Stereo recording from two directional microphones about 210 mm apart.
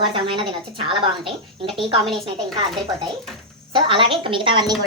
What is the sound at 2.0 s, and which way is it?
Speech, centre (ahead or behind).